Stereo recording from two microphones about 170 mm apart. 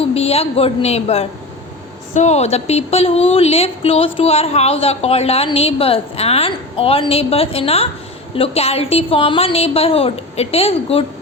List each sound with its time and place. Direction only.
0.0 s speech: 35° left (ahead or behind)